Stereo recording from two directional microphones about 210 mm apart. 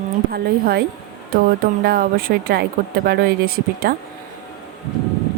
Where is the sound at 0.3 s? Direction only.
45° right (ahead or behind).